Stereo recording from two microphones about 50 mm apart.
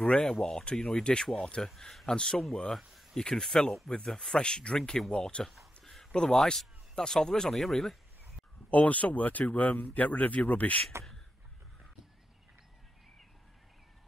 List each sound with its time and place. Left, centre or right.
0.2 s speech: centre
2.9 s a sound: centre
3.2 s speech: centre
5.4 s speech: centre
6.1 s speech: centre
8.6 s speech: left